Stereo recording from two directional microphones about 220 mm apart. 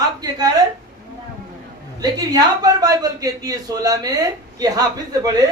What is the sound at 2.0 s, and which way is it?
Speech, 15° right (ahead or behind).